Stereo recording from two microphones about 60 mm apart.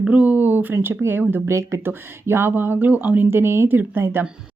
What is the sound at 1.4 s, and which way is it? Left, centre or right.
Speech, right.